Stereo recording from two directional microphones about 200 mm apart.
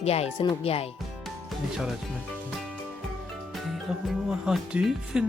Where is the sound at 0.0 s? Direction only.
30° left (ahead or behind).